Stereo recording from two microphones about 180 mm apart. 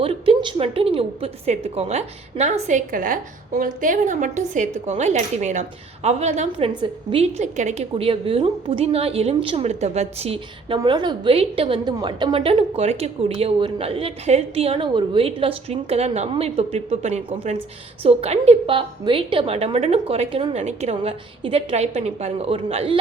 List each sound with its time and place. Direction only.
0.0 s a woman's voice: 30° right (ahead or behind)